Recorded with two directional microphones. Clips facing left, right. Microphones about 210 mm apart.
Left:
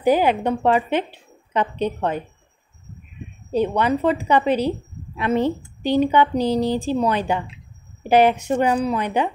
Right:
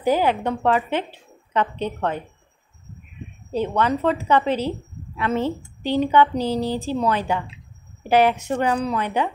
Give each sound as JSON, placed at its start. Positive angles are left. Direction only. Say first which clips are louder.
{"t": 0.0, "sound": "a woman's voice", "louder": "left 2 dB", "side_deg": 15}
{"t": 3.5, "sound": "a woman's voice", "louder": "left 2 dB", "side_deg": 15}